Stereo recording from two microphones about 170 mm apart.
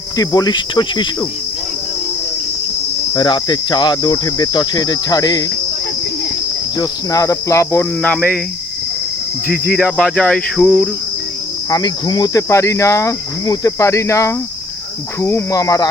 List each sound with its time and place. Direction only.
0.2 s cricket: 25° left (ahead or behind)
3.1 s cricket: 25° left (ahead or behind)
6.7 s cricket: 20° left (ahead or behind)
10.0 s cricket: 5° left (ahead or behind)
11.7 s cricket: 25° left (ahead or behind)